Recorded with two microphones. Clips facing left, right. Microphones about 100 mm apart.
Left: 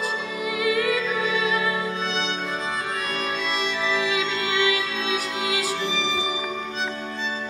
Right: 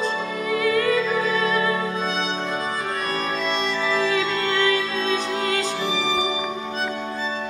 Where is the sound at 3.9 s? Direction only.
5° left (ahead or behind).